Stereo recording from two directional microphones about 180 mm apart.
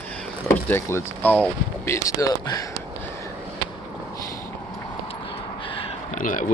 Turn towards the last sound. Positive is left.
turn(degrees=45)  # may be behind; listen again after turning